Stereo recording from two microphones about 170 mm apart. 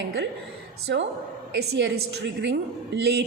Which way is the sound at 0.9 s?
90° right.